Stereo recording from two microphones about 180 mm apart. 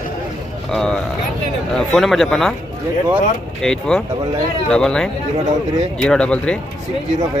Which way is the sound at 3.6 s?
5° left (ahead or behind).